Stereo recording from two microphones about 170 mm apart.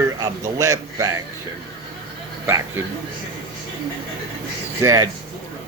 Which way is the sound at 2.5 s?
15° right (ahead or behind).